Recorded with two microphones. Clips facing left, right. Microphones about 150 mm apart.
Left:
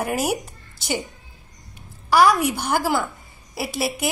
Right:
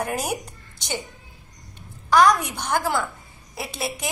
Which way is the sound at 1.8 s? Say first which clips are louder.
Left 1 dB; 10° left (ahead or behind).